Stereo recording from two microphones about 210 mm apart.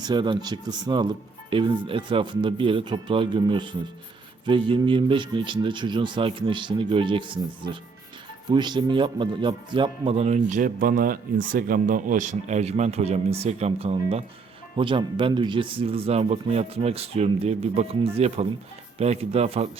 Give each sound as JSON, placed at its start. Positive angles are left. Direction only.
{"t": 0.0, "sound": "a man's voice", "side_deg": -20}